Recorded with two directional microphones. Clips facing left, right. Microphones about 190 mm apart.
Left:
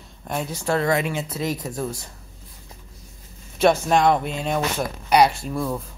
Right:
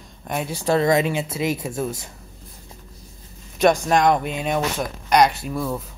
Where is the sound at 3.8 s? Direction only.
Centre (ahead or behind).